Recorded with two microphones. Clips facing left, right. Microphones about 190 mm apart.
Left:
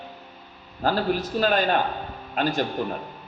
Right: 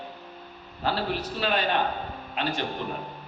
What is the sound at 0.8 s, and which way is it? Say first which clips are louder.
A man's voice: left 5 dB; 45° left (ahead or behind).